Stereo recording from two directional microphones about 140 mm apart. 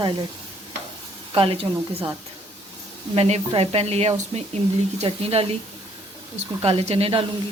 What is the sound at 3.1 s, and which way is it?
Speech, 45° right (ahead or behind).